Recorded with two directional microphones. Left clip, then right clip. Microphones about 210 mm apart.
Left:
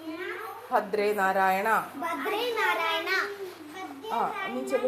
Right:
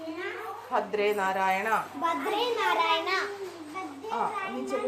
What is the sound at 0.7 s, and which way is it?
A woman's voice, 15° left (ahead or behind).